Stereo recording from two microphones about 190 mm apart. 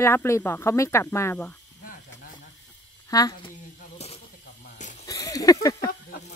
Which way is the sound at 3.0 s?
20° left (ahead or behind).